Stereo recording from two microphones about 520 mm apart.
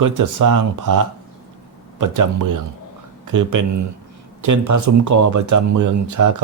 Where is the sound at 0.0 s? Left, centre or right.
Right.